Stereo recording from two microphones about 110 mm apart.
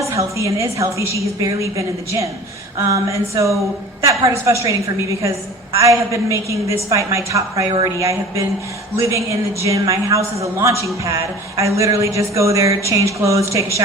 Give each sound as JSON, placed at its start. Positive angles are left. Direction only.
{"t": 0.1, "sound": "speech", "side_deg": -30}
{"t": 5.7, "sound": "speech", "side_deg": -30}